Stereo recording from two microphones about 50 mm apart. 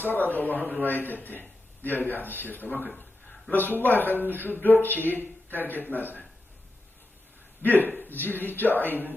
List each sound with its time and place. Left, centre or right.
0.0 s a man's voice: left
7.6 s a man's voice: left